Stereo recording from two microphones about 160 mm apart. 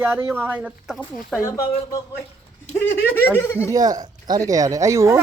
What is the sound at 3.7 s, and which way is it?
Speech, 25° right (ahead or behind).